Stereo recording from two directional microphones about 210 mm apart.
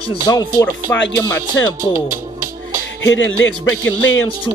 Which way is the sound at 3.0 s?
60° left (ahead or behind).